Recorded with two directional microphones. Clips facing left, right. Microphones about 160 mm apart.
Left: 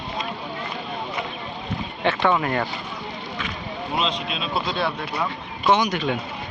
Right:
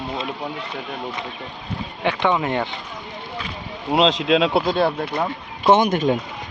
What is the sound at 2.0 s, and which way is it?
Speech, 15° right (ahead or behind).